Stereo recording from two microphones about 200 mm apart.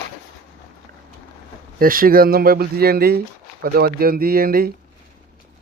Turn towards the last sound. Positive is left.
turn(degrees=-50)  # may be behind; listen again after turning